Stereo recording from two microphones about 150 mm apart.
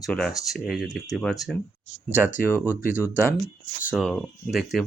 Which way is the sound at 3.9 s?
Centre (ahead or behind).